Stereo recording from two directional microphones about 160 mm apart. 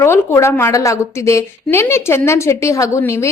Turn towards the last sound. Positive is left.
turn(degrees=15)  # may be behind; listen again after turning